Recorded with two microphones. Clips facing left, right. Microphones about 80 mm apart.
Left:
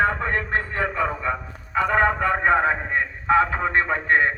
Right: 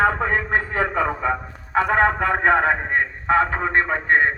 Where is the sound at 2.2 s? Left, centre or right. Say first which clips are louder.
Right 1 dB; right.